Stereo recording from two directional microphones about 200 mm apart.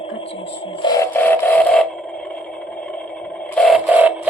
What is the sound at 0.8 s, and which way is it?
Wood, 15° left (ahead or behind).